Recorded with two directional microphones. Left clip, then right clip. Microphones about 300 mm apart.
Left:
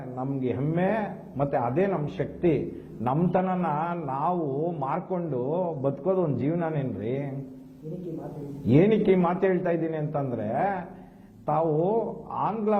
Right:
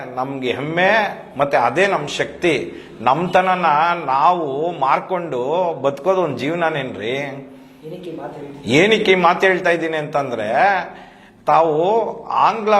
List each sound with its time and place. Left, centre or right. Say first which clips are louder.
0.6 s a man's voice: right 14 dB; centre
4.4 s a man's voice: right 8 dB; right
4.7 s a man's voice: right 12 dB; centre
5.3 s a man's voice: right 8 dB; right
6.2 s a man's voice: right 9 dB; centre
8.7 s a man's voice: right 8 dB; centre
11.6 s a man's voice: right 9 dB; right
11.9 s a man's voice: right 11 dB; centre